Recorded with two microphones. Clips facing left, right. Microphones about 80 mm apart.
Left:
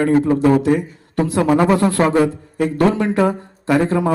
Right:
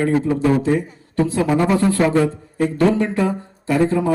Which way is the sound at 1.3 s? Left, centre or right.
Left.